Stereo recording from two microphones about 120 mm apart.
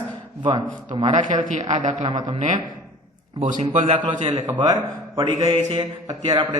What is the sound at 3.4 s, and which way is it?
Speech, 90° right.